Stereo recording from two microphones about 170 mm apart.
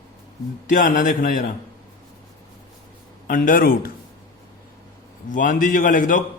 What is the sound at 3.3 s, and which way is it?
Speech, 50° left (ahead or behind).